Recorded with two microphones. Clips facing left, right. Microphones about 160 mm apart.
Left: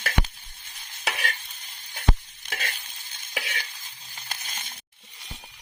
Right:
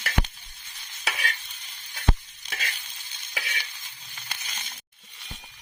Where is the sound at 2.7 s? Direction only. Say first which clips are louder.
Left 1 dB; 50° left (ahead or behind).